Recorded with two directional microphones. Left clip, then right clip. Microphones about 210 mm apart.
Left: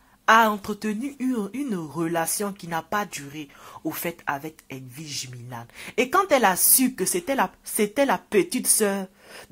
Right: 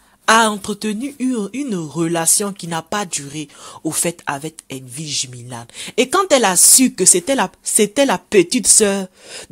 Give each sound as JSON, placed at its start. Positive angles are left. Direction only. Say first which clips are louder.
{"t": 0.2, "sound": "speech", "louder": "right 4 dB", "side_deg": -40}